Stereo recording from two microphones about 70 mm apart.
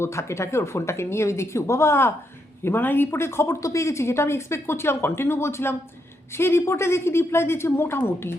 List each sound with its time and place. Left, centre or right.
0.0 s speech: left